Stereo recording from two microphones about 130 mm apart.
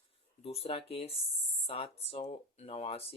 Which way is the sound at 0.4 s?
50° left (ahead or behind).